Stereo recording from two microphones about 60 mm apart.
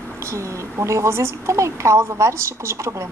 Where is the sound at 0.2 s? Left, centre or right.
Right.